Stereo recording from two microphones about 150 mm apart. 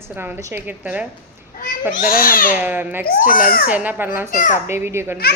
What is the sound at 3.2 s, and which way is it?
Speech, 70° left (ahead or behind).